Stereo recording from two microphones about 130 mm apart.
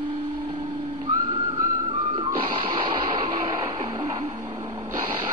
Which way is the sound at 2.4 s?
45° right (ahead or behind).